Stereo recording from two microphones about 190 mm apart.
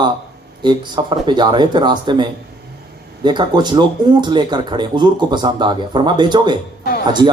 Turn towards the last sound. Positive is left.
turn(degrees=-25)  # may be behind; listen again after turning